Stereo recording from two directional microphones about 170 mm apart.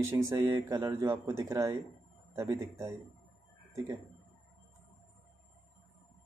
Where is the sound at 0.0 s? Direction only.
15° right (ahead or behind).